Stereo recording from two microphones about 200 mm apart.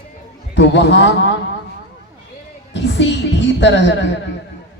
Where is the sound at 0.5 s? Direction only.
60° left (ahead or behind).